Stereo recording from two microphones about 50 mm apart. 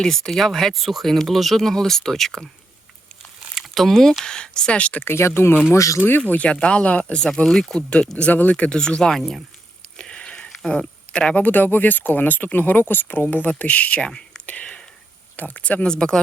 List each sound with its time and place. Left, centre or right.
0.0 s speech: centre
3.5 s a sound: centre
4.2 s speech: centre
5.1 s speech: left
5.7 s speech: left
6.3 s speech: left
7.8 s speech: left
8.3 s speech: left
9.0 s speech: centre
10.0 s a sound: centre
11.4 s speech: left
14.1 s whispering: centre
14.4 s whispering: left
15.4 s speech: left; by 16.2 s centre